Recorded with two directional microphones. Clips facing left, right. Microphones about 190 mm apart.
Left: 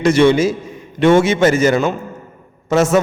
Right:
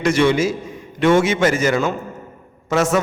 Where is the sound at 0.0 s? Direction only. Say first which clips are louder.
Left 4 dB; 30° left (ahead or behind).